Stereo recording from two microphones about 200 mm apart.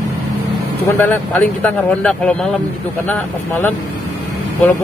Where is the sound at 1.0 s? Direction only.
10° left (ahead or behind).